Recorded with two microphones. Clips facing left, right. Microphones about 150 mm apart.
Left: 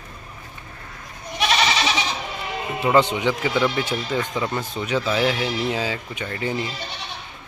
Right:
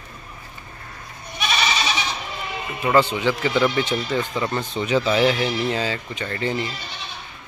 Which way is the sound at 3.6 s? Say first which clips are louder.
Right 2 dB; 5° left (ahead or behind).